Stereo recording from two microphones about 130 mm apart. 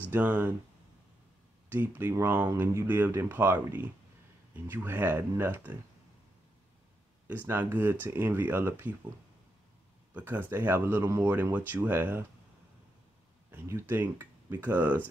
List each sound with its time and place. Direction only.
0.1 s speech: 15° right (ahead or behind)
1.7 s speech: 15° right (ahead or behind)
7.2 s speech: 15° right (ahead or behind)
10.1 s speech: 15° right (ahead or behind)
13.5 s speech: 20° right (ahead or behind)